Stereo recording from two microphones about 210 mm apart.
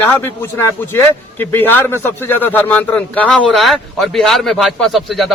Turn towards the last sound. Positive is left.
turn(degrees=0)  # may be behind; listen again after turning